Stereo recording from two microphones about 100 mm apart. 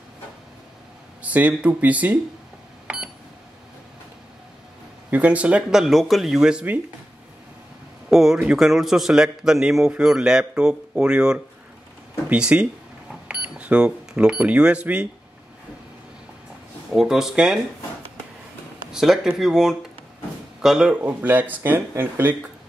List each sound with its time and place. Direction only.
1.2 s a man's voice: 15° right (ahead or behind)
5.1 s speech: 15° right (ahead or behind)
8.1 s a man's voice: 5° right (ahead or behind)
16.9 s speech: 5° right (ahead or behind)
18.9 s a man's voice: 5° right (ahead or behind)